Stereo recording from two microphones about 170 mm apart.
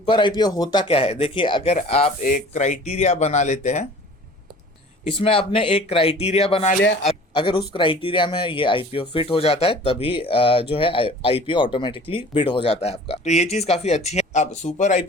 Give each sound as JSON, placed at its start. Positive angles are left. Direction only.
{"t": 0.0, "sound": "speech", "side_deg": 30}
{"t": 2.2, "sound": "speech", "side_deg": 50}
{"t": 5.2, "sound": "speech", "side_deg": 35}
{"t": 7.0, "sound": "a sound", "side_deg": 35}
{"t": 7.7, "sound": "speech", "side_deg": 30}